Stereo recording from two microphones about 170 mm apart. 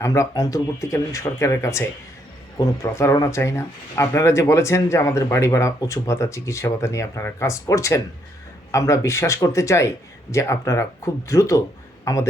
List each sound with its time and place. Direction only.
0.0 s speech: 20° left (ahead or behind)